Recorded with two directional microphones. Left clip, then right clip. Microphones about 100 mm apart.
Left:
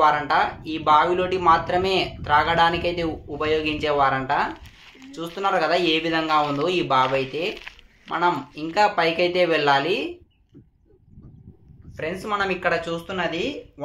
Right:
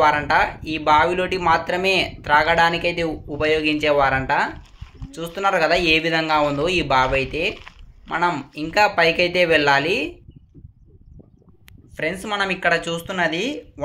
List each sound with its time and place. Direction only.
0.0 s speech: 25° right (ahead or behind)
12.0 s speech: 50° right (ahead or behind)
12.3 s speech: 30° right (ahead or behind)
12.9 s speech: 50° right (ahead or behind)